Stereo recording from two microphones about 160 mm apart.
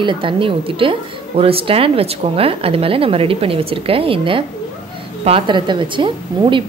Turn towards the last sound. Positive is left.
turn(degrees=-30)  # may be behind; listen again after turning